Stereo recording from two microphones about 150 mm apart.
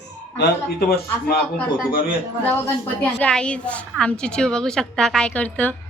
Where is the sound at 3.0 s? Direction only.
10° left (ahead or behind).